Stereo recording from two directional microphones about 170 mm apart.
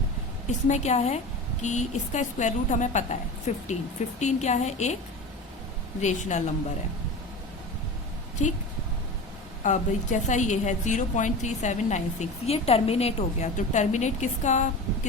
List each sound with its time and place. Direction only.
0.4 s a woman's voice: 45° left (ahead or behind)
6.0 s a woman's voice: 45° left (ahead or behind)
9.6 s a woman's voice: 45° left (ahead or behind)